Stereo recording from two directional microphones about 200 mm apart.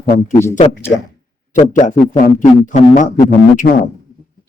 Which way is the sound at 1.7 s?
40° left (ahead or behind).